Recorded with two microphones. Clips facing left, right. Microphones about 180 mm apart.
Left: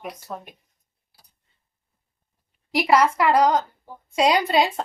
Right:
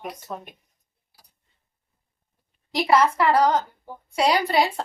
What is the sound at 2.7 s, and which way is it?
A woman's voice, 10° left (ahead or behind).